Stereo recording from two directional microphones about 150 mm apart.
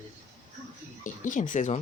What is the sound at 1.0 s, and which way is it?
Speech, 60° left (ahead or behind).